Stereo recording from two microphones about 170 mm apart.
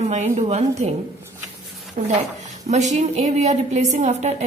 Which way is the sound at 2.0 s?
45° right (ahead or behind).